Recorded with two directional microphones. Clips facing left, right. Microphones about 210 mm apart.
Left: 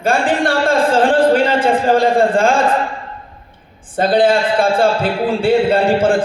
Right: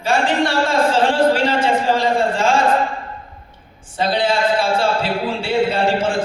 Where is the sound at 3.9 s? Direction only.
55° left (ahead or behind).